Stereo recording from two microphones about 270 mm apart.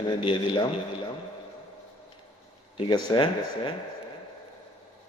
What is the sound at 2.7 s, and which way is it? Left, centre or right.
Speech, centre.